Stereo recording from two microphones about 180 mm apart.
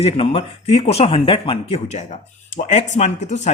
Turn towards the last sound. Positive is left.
turn(degrees=40)  # may be behind; listen again after turning